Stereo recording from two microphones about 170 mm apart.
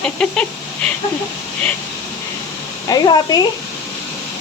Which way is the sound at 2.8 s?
25° left (ahead or behind).